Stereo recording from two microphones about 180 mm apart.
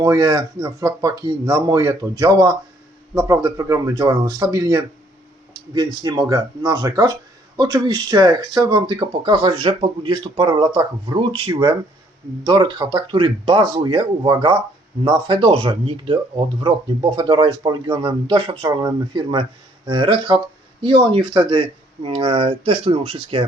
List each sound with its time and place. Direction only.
0.0 s speech: 20° right (ahead or behind)